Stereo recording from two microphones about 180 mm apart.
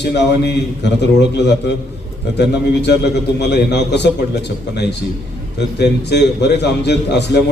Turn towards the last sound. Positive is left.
turn(degrees=70)  # may be behind; listen again after turning